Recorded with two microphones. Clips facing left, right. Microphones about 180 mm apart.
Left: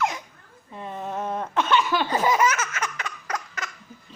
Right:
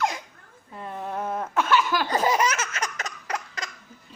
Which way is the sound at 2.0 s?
40° right (ahead or behind).